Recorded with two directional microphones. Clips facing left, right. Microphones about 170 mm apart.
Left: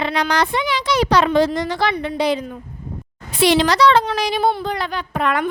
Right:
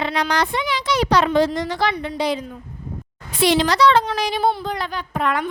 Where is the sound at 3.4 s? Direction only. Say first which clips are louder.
Left 2 dB; 75° left (ahead or behind).